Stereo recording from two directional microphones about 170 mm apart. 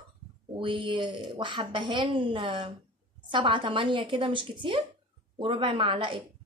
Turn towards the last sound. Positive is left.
turn(degrees=-30)  # may be behind; listen again after turning